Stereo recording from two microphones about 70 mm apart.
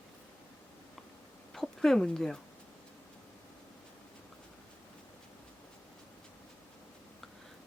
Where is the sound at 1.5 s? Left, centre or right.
Centre.